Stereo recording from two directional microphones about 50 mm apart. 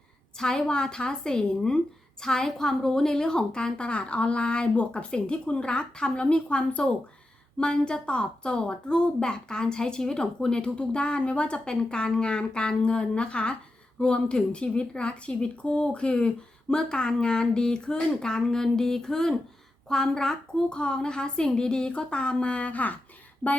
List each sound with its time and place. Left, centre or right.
0.3 s a woman's voice: centre; by 23.0 s left